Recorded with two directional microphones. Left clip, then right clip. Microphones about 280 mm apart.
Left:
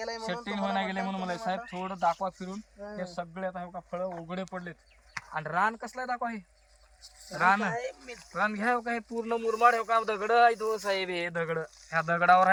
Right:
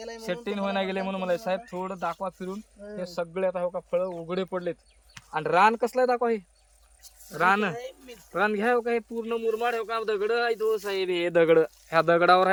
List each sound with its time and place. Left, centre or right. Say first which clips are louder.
0.4 s speech: right 3 dB; centre